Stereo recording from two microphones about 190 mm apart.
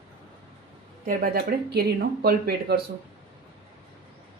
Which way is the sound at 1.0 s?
50° right (ahead or behind).